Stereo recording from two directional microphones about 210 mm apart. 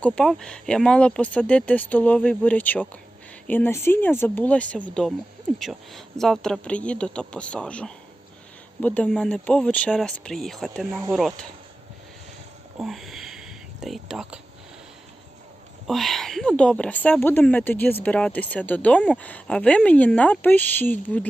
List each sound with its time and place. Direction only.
0.0 s speech: 5° left (ahead or behind)
12.8 s a sound: centre (ahead or behind)
13.8 s speech: centre (ahead or behind)
15.9 s speech: centre (ahead or behind)